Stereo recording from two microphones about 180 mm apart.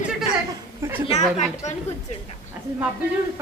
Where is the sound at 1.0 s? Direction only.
40° left (ahead or behind).